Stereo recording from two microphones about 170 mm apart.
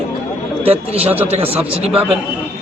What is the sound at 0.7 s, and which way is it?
Speech, 35° right (ahead or behind).